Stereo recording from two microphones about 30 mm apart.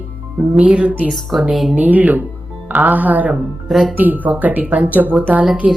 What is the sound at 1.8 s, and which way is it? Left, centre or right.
Speech, right.